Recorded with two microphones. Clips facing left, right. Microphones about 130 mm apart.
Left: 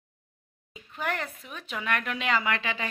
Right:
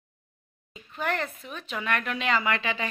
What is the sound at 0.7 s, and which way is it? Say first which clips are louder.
Speech: right 2 dB; 10° left (ahead or behind).